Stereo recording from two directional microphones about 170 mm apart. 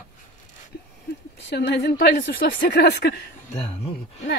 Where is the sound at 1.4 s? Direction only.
75° left (ahead or behind).